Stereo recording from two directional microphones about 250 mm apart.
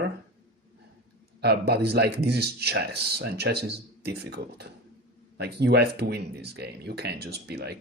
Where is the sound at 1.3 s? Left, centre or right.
Right.